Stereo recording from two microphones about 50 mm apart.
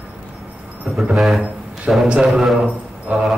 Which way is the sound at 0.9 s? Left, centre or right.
Right.